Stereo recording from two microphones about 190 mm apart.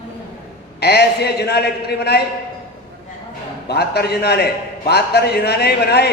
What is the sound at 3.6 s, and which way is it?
A man's voice, 60° left (ahead or behind).